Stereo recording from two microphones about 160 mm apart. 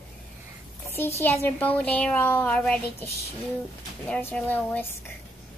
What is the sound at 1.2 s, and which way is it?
Speech, 15° left (ahead or behind).